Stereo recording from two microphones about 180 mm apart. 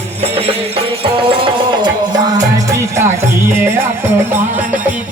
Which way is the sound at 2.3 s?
15° right (ahead or behind).